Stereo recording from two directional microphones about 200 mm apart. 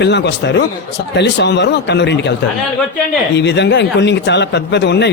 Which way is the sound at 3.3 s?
60° left (ahead or behind).